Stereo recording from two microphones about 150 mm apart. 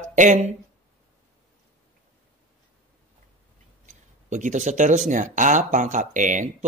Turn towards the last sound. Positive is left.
turn(degrees=-55)  # may be behind; listen again after turning